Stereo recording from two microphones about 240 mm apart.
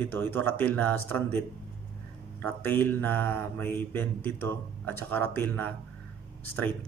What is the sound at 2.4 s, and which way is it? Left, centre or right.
Speech, centre.